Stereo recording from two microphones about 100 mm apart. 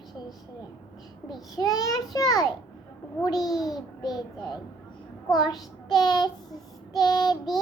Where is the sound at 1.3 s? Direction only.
40° left (ahead or behind).